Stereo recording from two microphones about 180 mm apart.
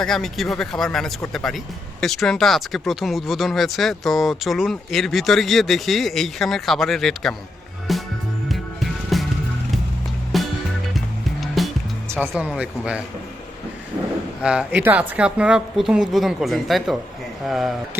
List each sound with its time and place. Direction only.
0.0 s speech: centre (ahead or behind)
7.9 s music: centre (ahead or behind)
10.3 s music: centre (ahead or behind)
11.6 s music: centre (ahead or behind)
12.3 s speech: 5° right (ahead or behind)
14.4 s speech: 5° right (ahead or behind)